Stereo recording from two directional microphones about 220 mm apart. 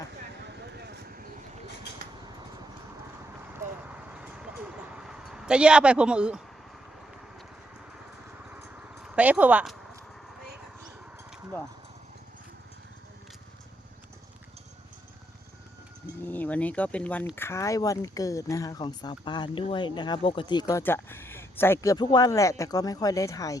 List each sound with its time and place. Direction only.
0.8 s vehicle: 50° right (ahead or behind)
3.5 s vehicle: 5° right (ahead or behind)
8.4 s a sound: 10° right (ahead or behind)
16.2 s speech: 10° left (ahead or behind)